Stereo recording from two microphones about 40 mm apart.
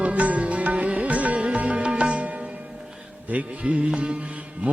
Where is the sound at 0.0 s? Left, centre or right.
Right.